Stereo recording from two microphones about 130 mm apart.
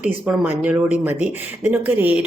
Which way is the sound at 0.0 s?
10° right (ahead or behind).